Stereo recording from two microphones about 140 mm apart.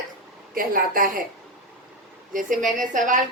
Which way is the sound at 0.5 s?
90° right.